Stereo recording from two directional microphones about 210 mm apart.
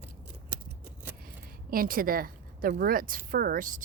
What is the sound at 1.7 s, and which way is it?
Speech, 45° right (ahead or behind).